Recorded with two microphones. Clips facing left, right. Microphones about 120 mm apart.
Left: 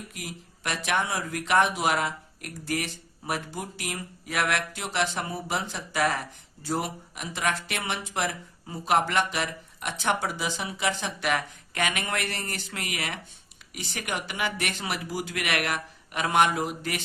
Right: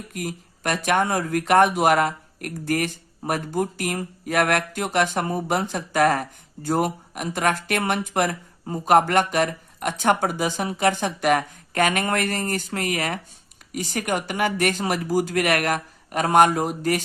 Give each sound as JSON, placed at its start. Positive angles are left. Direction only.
{"t": 0.1, "sound": "speech", "side_deg": -50}